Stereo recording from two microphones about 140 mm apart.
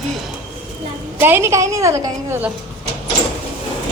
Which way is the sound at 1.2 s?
15° right (ahead or behind).